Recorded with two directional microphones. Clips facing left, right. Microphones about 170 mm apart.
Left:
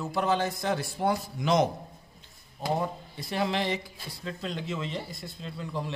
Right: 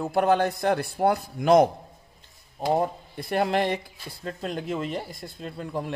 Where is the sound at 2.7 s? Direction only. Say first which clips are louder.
Right 5 dB; 55° right (ahead or behind).